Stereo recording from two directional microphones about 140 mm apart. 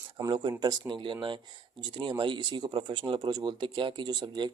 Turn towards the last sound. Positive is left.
turn(degrees=-30)  # may be behind; listen again after turning